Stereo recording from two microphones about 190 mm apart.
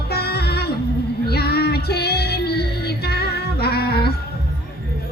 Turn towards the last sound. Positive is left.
turn(degrees=55)  # may be behind; listen again after turning